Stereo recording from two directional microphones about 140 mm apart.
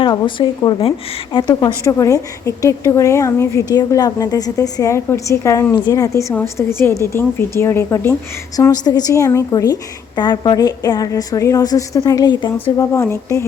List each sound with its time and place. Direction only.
0.0 s a woman's voice: 35° left (ahead or behind)
12.7 s a woman's voice: 20° left (ahead or behind)